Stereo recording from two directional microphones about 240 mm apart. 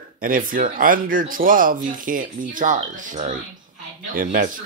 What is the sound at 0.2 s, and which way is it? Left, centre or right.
Speech, right.